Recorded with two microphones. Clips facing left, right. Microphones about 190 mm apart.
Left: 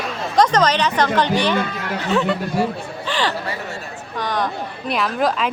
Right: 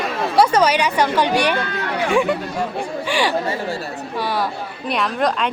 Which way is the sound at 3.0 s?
10° right (ahead or behind).